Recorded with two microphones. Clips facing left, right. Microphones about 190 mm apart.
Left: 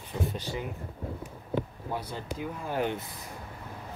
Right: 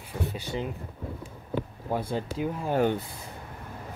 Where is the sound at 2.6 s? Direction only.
45° right (ahead or behind).